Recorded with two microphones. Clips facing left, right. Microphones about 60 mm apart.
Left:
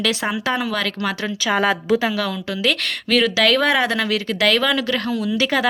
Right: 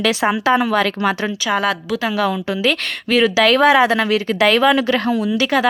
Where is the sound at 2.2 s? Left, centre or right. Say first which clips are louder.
Right 5 dB; centre; by 5.3 s right.